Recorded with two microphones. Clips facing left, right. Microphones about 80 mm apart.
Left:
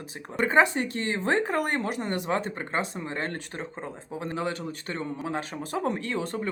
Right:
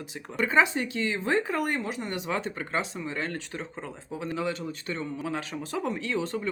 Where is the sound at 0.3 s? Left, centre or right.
Left.